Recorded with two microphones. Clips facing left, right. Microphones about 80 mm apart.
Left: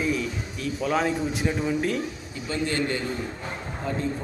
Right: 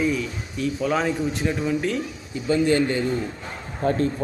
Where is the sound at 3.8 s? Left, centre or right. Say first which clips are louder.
Right 9 dB; right.